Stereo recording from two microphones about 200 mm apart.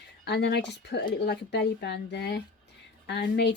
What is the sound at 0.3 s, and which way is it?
Speech, 55° left (ahead or behind).